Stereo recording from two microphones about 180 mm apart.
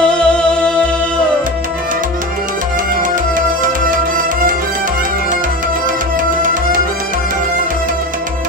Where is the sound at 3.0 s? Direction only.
45° right (ahead or behind).